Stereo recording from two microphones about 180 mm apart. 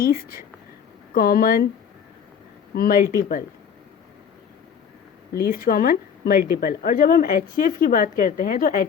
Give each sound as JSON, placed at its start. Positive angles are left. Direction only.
{"t": 0.0, "sound": "speech", "side_deg": 55}
{"t": 2.7, "sound": "speech", "side_deg": 55}
{"t": 5.4, "sound": "a woman's voice", "side_deg": 55}